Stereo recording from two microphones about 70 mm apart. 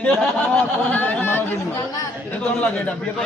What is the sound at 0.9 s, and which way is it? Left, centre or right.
Speech, left.